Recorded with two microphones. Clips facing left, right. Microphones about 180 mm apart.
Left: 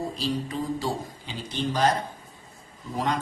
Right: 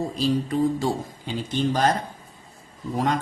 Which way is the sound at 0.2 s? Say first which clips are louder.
Right 10 dB; 45° right (ahead or behind).